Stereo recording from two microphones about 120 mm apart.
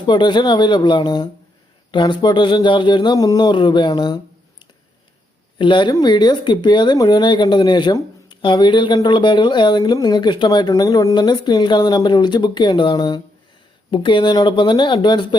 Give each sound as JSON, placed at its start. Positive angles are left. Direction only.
{"t": 0.0, "sound": "speech", "side_deg": 40}
{"t": 5.5, "sound": "speech", "side_deg": 40}